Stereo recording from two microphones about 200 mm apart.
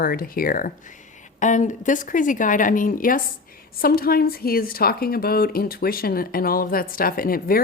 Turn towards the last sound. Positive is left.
turn(degrees=45)  # may be behind; listen again after turning